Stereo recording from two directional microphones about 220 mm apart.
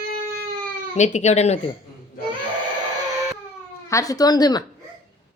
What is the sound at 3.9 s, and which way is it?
Speech, 15° left (ahead or behind).